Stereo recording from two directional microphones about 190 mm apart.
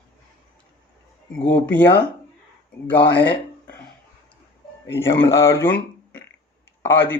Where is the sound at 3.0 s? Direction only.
60° left (ahead or behind).